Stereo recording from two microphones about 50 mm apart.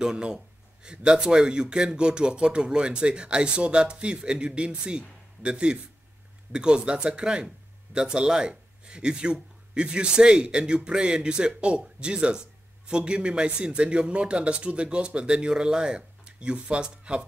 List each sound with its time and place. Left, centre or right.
0.0 s speech: centre